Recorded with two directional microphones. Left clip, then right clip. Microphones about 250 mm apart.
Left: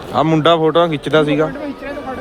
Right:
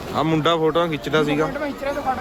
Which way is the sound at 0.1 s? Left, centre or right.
Centre.